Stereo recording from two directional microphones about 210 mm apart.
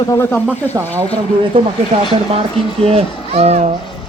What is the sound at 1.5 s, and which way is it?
Speech, 25° right (ahead or behind).